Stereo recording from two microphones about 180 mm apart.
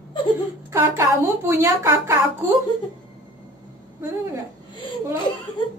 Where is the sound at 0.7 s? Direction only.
15° right (ahead or behind).